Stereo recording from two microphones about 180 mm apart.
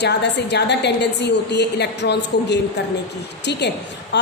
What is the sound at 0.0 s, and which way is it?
A woman's voice, 70° left (ahead or behind).